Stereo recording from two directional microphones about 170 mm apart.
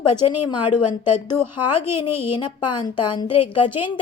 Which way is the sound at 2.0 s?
30° left (ahead or behind).